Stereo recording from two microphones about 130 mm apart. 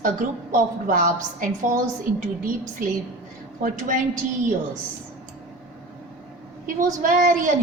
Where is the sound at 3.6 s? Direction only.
90° right.